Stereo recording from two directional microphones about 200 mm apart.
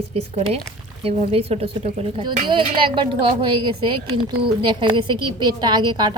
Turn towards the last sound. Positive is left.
turn(degrees=-20)  # may be behind; listen again after turning